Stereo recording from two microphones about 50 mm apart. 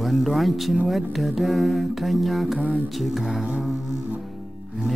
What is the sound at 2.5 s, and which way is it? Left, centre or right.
Mantra, right.